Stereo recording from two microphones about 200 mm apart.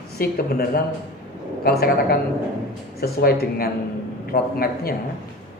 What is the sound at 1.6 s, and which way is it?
Speech, 50° left (ahead or behind).